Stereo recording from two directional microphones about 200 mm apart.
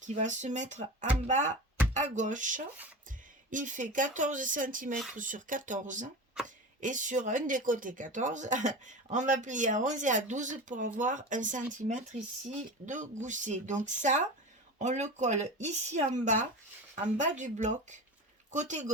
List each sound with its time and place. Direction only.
0.1 s speech: 35° right (ahead or behind)
6.4 s a sound: 5° right (ahead or behind)
6.8 s speech: 40° right (ahead or behind)